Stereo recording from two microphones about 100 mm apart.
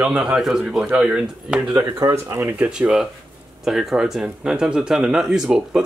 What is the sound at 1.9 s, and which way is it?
Speech, 30° right (ahead or behind).